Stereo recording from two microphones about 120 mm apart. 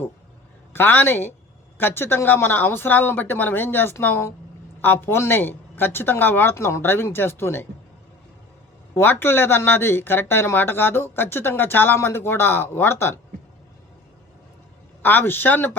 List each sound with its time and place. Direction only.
0.7 s speech: 20° left (ahead or behind)
9.0 s speech: 20° left (ahead or behind)
15.0 s speech: 15° left (ahead or behind)